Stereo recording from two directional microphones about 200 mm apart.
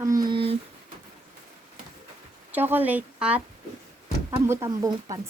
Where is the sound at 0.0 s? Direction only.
20° right (ahead or behind).